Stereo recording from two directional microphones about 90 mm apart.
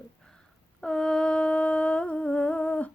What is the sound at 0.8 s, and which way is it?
Humming, 10° left (ahead or behind).